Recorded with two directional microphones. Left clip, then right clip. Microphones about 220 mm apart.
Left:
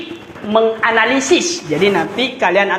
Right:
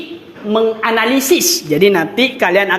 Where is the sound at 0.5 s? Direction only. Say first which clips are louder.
Left 1 dB; 45° right (ahead or behind).